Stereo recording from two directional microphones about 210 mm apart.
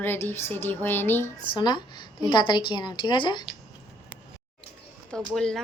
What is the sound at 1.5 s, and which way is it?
A woman's voice, 20° left (ahead or behind).